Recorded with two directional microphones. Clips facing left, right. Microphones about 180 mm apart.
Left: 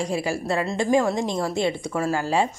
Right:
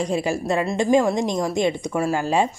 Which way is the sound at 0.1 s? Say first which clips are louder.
Right 3 dB; 20° right (ahead or behind).